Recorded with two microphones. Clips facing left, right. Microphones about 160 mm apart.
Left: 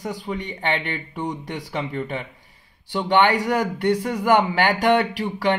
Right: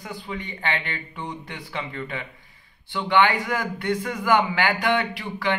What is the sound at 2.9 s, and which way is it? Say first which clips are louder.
A man's voice: left 2 dB; 40° left (ahead or behind).